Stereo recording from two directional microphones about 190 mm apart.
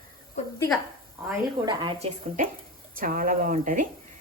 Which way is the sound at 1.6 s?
25° right (ahead or behind).